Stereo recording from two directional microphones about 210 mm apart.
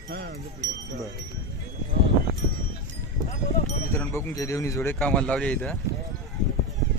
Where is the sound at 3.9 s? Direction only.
10° left (ahead or behind).